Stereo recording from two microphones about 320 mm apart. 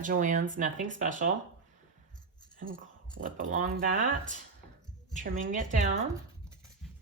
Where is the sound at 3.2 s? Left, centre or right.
Right.